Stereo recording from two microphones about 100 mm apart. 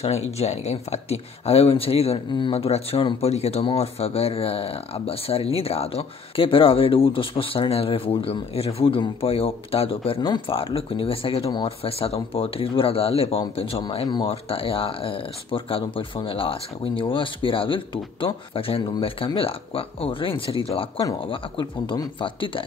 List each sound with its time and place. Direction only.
0.0 s speech: 90° left
3.2 s speech: 90° left; by 10.1 s 70° left (ahead or behind)
10.2 s speech: 55° left (ahead or behind)
22.2 s speech: 60° left (ahead or behind)